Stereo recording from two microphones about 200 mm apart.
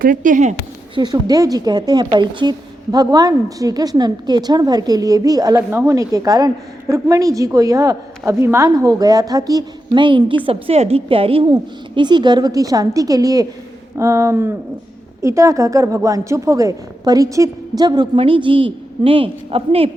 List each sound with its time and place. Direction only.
0.0 s speech: 40° right (ahead or behind)
0.9 s a woman's voice: 20° right (ahead or behind)